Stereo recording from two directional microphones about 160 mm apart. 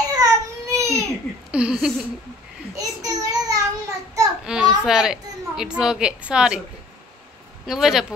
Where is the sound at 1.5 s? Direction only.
5° right (ahead or behind).